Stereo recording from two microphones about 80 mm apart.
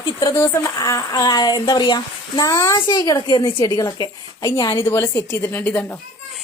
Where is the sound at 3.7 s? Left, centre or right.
Left.